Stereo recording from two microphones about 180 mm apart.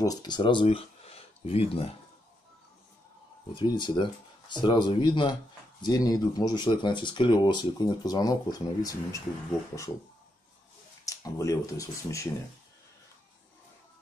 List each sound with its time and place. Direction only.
0.0 s speech: 20° left (ahead or behind)
3.5 s speech: 25° left (ahead or behind)
11.1 s speech: 20° left (ahead or behind)